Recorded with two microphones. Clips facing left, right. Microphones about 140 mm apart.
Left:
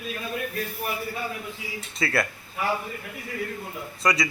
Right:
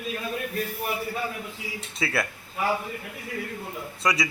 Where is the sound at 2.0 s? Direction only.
10° right (ahead or behind).